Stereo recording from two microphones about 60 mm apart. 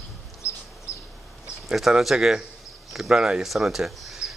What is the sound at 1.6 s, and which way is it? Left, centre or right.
Speech, centre.